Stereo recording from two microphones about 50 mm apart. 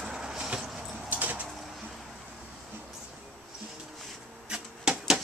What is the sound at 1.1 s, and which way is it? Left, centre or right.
Bird, right.